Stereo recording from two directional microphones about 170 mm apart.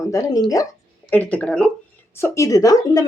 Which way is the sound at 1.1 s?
10° left (ahead or behind).